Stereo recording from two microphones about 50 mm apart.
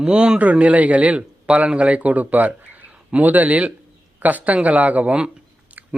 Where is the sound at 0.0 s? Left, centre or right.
Right.